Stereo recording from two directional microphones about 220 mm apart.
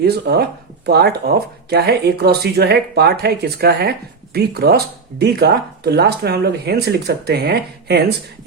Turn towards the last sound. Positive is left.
turn(degrees=-45)  # may be behind; listen again after turning